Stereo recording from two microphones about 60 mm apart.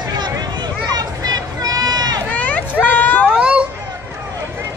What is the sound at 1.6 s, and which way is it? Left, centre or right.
Run, right.